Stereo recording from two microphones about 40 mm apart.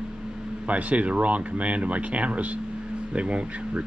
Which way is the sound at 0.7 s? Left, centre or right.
Right.